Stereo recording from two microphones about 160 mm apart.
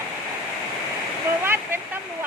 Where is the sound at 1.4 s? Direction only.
15° right (ahead or behind).